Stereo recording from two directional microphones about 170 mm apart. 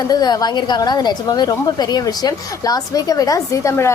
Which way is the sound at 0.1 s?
25° left (ahead or behind).